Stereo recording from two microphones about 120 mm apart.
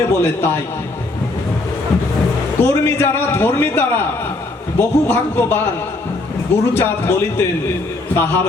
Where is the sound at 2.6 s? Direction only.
20° left (ahead or behind).